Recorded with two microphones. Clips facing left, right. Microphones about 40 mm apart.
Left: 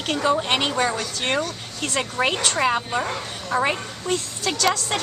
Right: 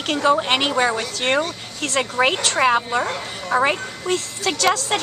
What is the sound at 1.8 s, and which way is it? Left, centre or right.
A woman's voice, centre.